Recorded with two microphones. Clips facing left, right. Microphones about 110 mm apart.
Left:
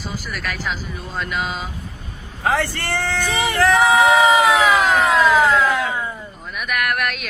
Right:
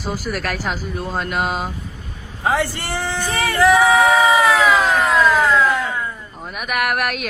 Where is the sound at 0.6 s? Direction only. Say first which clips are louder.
Right 3 dB; 50° right (ahead or behind).